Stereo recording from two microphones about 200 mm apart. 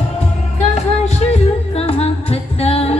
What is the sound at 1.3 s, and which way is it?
Music, 30° left (ahead or behind).